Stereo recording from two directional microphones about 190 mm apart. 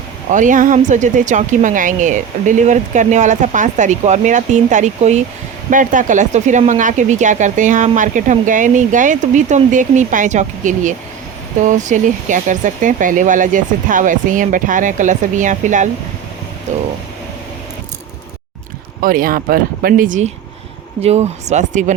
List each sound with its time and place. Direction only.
0.3 s speech: 40° right (ahead or behind)
19.0 s speech: 45° right (ahead or behind)